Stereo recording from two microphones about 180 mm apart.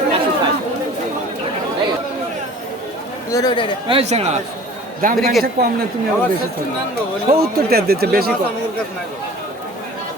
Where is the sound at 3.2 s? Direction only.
20° left (ahead or behind).